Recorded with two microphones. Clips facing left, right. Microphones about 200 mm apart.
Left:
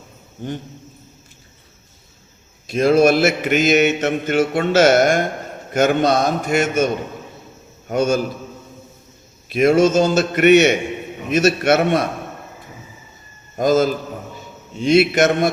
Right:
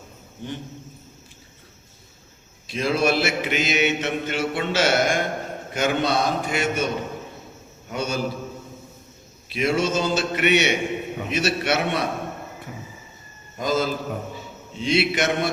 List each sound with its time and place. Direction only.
2.6 s mantra: 45° left (ahead or behind)
7.9 s mantra: 45° left (ahead or behind)
9.5 s mantra: 45° left (ahead or behind)
13.6 s mantra: 45° left (ahead or behind)